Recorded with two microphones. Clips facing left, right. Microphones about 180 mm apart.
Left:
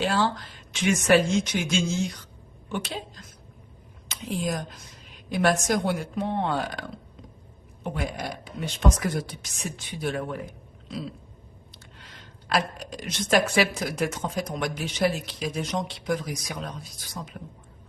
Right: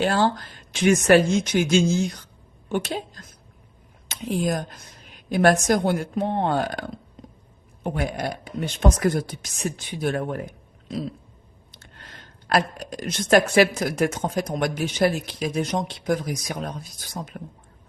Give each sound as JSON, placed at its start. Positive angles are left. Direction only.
{"t": 0.0, "sound": "a woman's voice", "side_deg": -50}
{"t": 7.9, "sound": "speech", "side_deg": -55}